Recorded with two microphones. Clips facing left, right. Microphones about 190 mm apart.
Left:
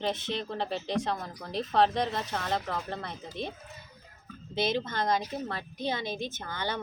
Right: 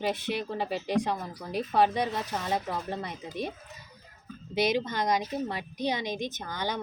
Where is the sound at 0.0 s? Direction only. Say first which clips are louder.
Right 2 dB; 10° right (ahead or behind).